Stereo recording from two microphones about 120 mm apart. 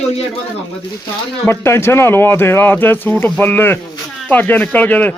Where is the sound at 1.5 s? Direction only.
20° left (ahead or behind).